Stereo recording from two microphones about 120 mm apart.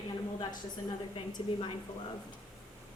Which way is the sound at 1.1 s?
45° left (ahead or behind).